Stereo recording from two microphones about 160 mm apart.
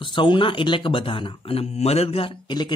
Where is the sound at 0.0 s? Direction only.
30° left (ahead or behind).